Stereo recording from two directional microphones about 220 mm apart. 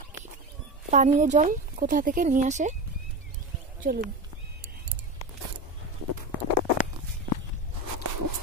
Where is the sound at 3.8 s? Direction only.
45° right (ahead or behind).